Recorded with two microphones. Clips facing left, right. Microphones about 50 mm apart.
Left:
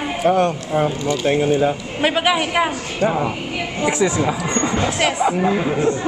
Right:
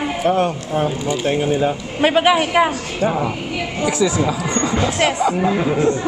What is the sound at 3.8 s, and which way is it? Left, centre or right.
Speech, left.